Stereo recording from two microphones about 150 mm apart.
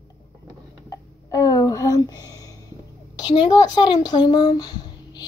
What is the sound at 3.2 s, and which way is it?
Speech, 30° left (ahead or behind).